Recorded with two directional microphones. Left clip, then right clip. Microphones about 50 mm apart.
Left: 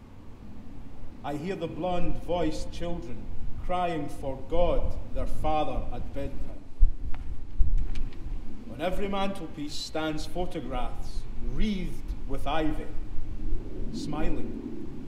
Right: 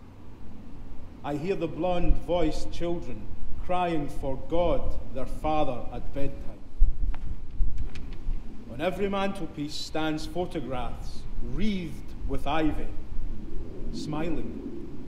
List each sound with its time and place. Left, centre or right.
1.2 s a man's voice: left
8.7 s a man's voice: left
13.9 s a man's voice: left